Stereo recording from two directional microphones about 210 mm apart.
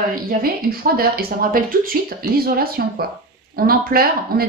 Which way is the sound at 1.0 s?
45° right (ahead or behind).